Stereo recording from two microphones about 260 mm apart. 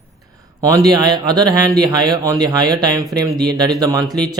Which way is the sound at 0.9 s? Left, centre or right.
Centre.